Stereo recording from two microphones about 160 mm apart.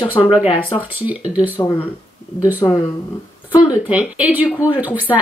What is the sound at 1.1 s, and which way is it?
Speech, 10° right (ahead or behind).